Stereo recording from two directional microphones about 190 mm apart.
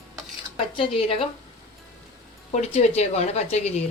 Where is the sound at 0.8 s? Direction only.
30° left (ahead or behind).